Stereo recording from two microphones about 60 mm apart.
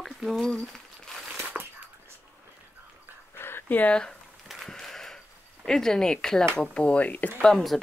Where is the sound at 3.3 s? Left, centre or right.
Left.